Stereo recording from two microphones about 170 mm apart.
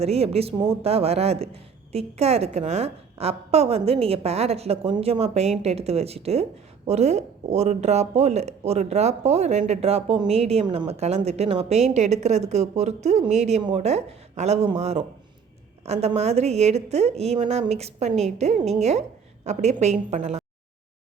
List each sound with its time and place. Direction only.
0.0 s a woman's voice: 35° right (ahead or behind)
13.6 s speech: 25° right (ahead or behind)
13.8 s a woman's voice: 40° right (ahead or behind)